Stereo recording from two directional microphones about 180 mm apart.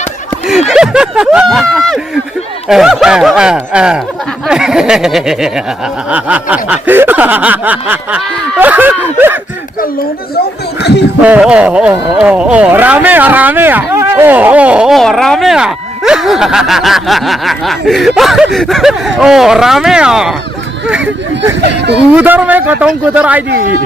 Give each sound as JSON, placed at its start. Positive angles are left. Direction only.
{"t": 0.7, "sound": "speech", "side_deg": -5}
{"t": 6.1, "sound": "snicker", "side_deg": -10}
{"t": 10.8, "sound": "speech", "side_deg": 70}
{"t": 11.2, "sound": "snicker", "side_deg": -5}
{"t": 12.1, "sound": "speech", "side_deg": -5}
{"t": 21.8, "sound": "speech", "side_deg": -70}
{"t": 22.1, "sound": "snicker", "side_deg": -10}
{"t": 23.5, "sound": "speech", "side_deg": -50}